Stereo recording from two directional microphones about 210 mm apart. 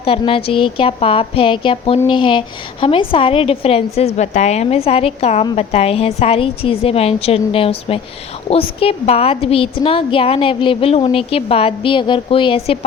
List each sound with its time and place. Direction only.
0.0 s a woman's voice: 25° left (ahead or behind)